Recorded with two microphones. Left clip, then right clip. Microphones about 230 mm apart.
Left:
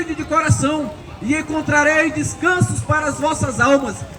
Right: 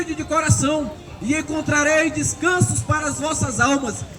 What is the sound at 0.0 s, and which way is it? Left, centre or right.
A man's voice, right.